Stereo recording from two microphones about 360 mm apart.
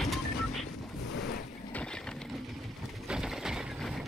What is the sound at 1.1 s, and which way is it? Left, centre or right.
Boat, left.